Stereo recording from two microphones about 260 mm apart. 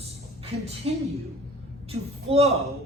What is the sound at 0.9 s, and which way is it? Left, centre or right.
A woman's voice, right.